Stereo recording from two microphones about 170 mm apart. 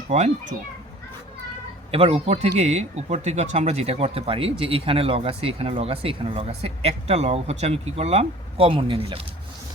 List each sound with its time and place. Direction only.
1.9 s speech: 35° right (ahead or behind)